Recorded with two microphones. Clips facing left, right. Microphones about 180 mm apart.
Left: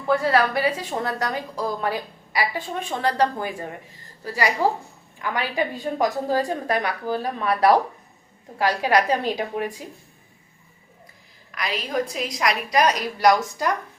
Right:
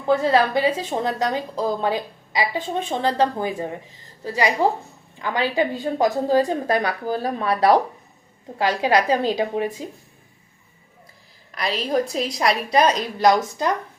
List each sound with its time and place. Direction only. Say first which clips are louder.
0.1 s a woman's voice: right 2 dB; 20° right (ahead or behind)
11.5 s a woman's voice: right 4 dB; 35° right (ahead or behind)